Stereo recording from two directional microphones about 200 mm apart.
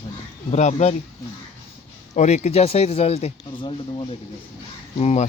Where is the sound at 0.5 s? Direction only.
35° left (ahead or behind).